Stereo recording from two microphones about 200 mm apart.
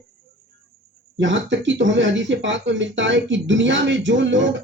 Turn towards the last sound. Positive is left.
turn(degrees=-65)  # may be behind; listen again after turning